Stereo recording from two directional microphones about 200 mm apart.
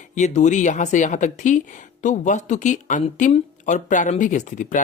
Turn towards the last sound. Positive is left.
turn(degrees=40)  # may be behind; listen again after turning